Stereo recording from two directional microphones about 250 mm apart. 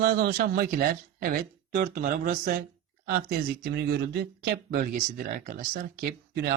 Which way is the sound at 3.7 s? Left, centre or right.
Right.